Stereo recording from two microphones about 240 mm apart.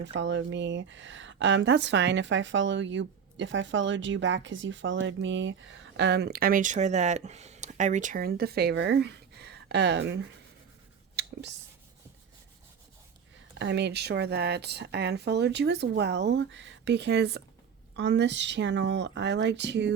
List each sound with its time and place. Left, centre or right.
0.0 s speech: right
11.2 s whispering: right
13.6 s speech: right